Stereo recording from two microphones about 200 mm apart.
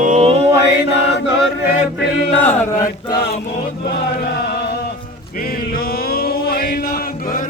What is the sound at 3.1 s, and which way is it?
Music, 55° left (ahead or behind).